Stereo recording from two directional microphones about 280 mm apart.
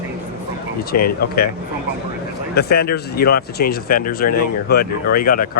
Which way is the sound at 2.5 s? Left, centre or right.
Left.